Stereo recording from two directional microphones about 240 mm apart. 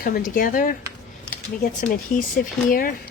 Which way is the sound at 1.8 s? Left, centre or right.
Left.